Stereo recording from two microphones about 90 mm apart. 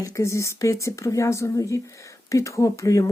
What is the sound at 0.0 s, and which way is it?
Speech, 35° left (ahead or behind).